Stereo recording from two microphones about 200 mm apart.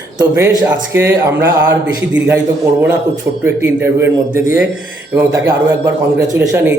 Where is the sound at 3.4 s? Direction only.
10° right (ahead or behind).